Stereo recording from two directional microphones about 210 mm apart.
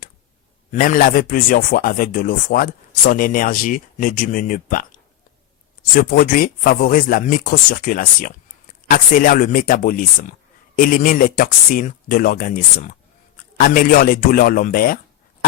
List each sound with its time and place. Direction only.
0.7 s speech: 40° left (ahead or behind)
5.9 s speech: 45° left (ahead or behind)